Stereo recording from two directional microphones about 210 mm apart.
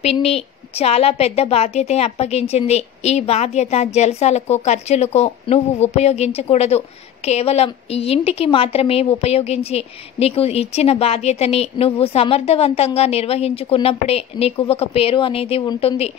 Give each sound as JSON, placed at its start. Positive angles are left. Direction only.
{"t": 0.0, "sound": "a woman's voice", "side_deg": 30}